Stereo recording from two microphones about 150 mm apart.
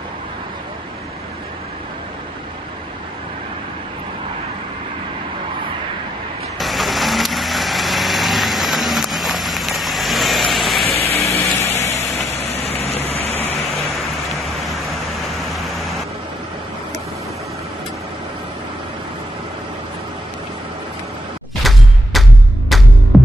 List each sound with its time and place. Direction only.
6.6 s vehicle: centre (ahead or behind)
11.1 s ratchet: 20° left (ahead or behind)
11.5 s a sound: 20° left (ahead or behind)
12.8 s vehicle: 45° left (ahead or behind)
13.7 s a sound: centre (ahead or behind)
21.6 s music: centre (ahead or behind)
23.1 s throbbing: centre (ahead or behind)